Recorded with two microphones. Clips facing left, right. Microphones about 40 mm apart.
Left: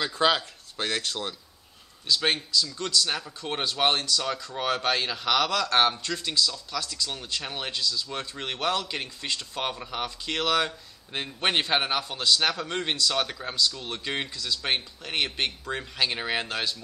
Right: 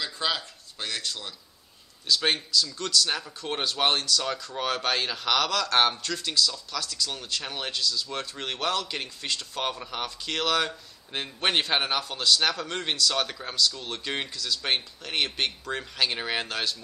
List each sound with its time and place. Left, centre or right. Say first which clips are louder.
0.0 s speech: left 6 dB; left
2.0 s a man's voice: even; centre